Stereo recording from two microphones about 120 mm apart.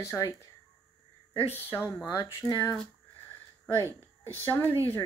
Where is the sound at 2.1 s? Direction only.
25° left (ahead or behind).